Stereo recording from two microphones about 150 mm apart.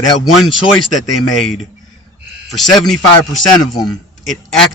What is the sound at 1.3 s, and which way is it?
Speech, centre (ahead or behind).